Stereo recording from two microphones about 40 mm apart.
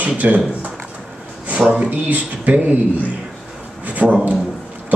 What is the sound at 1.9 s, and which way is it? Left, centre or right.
Speech, right.